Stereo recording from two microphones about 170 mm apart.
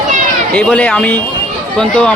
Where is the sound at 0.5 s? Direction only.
5° left (ahead or behind).